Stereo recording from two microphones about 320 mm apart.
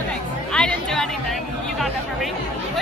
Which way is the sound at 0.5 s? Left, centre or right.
Centre.